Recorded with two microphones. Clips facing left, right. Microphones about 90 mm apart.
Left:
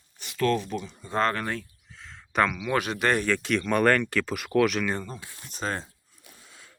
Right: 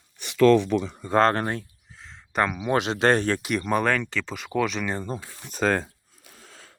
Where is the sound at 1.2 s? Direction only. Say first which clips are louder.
Right 5 dB; 35° right (ahead or behind).